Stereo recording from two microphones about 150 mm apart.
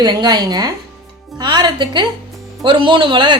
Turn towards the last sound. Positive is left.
turn(degrees=-30)  # may be behind; listen again after turning